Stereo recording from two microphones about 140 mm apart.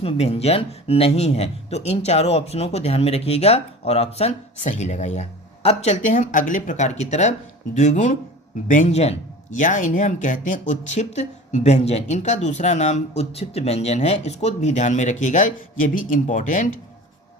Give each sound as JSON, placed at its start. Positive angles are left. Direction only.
{"t": 0.0, "sound": "speech", "side_deg": 45}